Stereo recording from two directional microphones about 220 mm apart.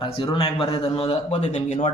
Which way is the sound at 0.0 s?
25° left (ahead or behind).